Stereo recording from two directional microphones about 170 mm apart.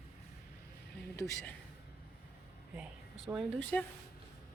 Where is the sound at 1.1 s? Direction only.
15° left (ahead or behind).